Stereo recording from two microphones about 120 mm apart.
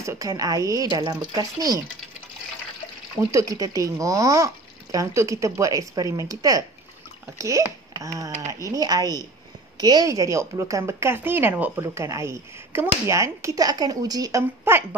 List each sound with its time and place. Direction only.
0.0 s a woman's voice: 25° right (ahead or behind)
3.3 s a woman's voice: 25° right (ahead or behind)
14.6 s speech: 15° right (ahead or behind)